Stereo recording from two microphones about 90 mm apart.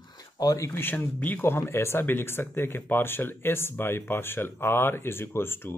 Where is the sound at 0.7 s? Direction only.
20° left (ahead or behind).